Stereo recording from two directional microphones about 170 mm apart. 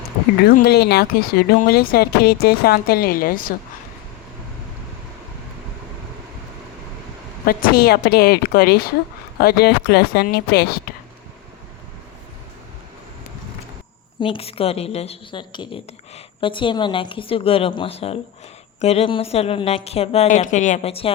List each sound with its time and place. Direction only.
0.4 s speech: 65° left (ahead or behind)
7.4 s speech: 60° left (ahead or behind)
14.2 s a woman's voice: 30° left (ahead or behind)